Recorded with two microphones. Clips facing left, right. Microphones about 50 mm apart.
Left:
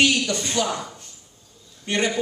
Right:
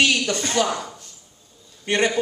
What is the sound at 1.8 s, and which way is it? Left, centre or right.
Speech, right.